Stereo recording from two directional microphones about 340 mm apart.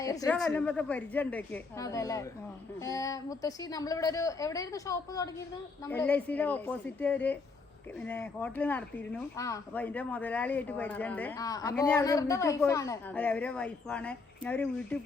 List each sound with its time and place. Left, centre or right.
0.0 s a woman's voice: centre